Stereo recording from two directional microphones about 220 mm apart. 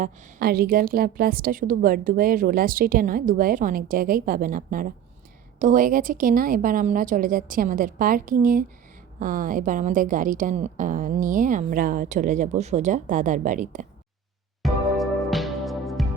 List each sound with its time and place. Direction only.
0.0 s a woman's voice: 45° right (ahead or behind)
14.6 s music: centre (ahead or behind)